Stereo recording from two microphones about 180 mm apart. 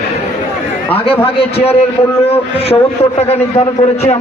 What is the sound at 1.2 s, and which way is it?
Speech, 35° left (ahead or behind).